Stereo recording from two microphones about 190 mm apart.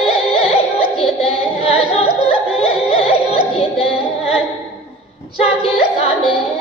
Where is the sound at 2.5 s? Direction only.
30° left (ahead or behind).